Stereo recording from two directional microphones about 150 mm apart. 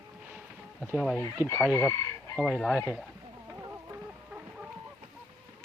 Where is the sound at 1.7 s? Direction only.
20° left (ahead or behind).